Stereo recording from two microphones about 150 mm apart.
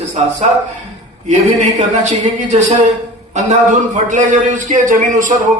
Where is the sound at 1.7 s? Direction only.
50° right (ahead or behind).